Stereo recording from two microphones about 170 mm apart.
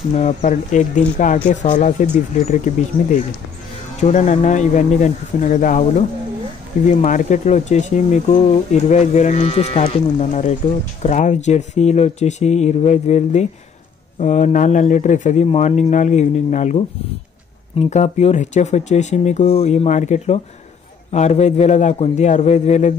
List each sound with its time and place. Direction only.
0.2 s speech: 45° left (ahead or behind)